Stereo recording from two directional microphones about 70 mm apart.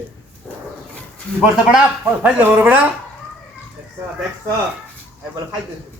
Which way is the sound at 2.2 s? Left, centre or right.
Right.